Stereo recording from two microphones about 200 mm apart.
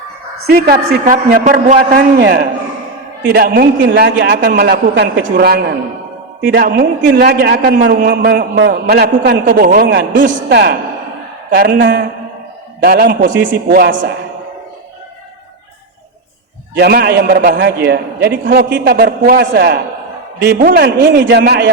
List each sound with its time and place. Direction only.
1.0 s a man's voice: 40° right (ahead or behind)
3.3 s a man's voice: 50° right (ahead or behind)
12.8 s a man's voice: 50° right (ahead or behind)
16.7 s a man's voice: 55° right (ahead or behind)